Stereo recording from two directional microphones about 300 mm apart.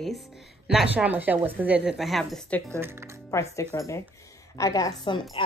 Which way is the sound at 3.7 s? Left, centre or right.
Centre.